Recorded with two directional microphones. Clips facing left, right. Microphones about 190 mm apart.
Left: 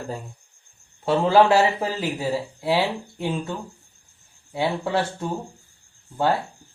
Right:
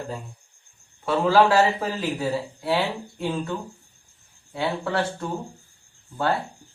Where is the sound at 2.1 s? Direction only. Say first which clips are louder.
Left 1 dB; 15° left (ahead or behind).